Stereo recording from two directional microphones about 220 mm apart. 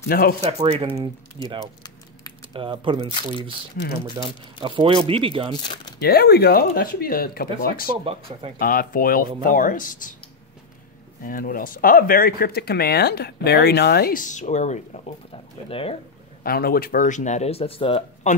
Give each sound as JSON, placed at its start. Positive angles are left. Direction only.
{"t": 0.1, "sound": "speech", "side_deg": 40}
{"t": 0.4, "sound": "speech", "side_deg": -25}
{"t": 1.6, "sound": "a sound", "side_deg": 15}
{"t": 2.5, "sound": "speech", "side_deg": -20}
{"t": 4.6, "sound": "speech", "side_deg": -20}
{"t": 5.6, "sound": "speech", "side_deg": 20}
{"t": 5.9, "sound": "speech", "side_deg": 45}
{"t": 8.0, "sound": "speech", "side_deg": -25}
{"t": 8.5, "sound": "speech", "side_deg": 40}
{"t": 11.2, "sound": "speech", "side_deg": 40}
{"t": 16.4, "sound": "speech", "side_deg": 45}